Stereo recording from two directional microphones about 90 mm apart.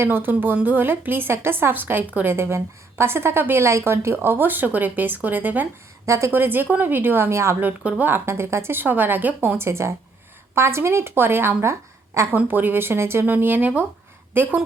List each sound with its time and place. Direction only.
0.0 s speech: 25° right (ahead or behind)
6.1 s speech: 30° right (ahead or behind)
7.9 s speech: 20° right (ahead or behind)
12.4 s speech: 20° right (ahead or behind)